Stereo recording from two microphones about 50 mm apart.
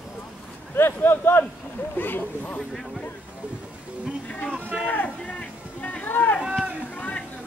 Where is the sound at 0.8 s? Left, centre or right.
Left.